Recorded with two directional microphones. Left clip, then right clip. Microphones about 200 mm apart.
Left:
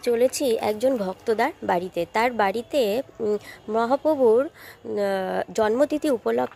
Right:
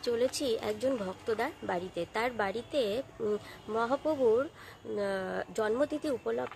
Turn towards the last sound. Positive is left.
turn(degrees=40)  # may be behind; listen again after turning